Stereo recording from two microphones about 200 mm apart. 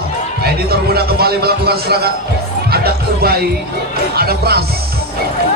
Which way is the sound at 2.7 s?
50° right (ahead or behind).